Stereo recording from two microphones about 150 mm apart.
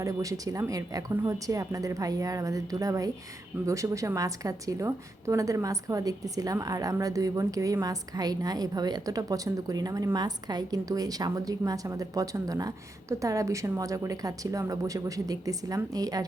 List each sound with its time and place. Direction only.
0.0 s a woman's voice: 20° right (ahead or behind)